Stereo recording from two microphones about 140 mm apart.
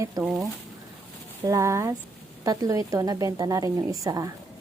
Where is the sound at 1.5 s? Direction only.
20° right (ahead or behind).